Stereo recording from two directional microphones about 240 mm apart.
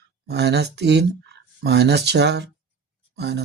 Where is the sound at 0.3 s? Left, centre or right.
Right.